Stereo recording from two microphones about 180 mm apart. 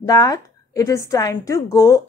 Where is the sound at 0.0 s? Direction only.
20° left (ahead or behind).